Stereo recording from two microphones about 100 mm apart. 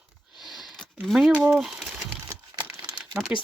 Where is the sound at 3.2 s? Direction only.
10° right (ahead or behind).